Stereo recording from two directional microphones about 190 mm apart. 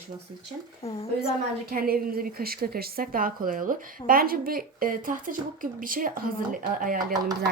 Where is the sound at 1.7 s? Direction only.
50° right (ahead or behind).